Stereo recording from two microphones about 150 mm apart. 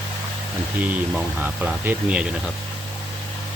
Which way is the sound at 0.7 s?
10° right (ahead or behind).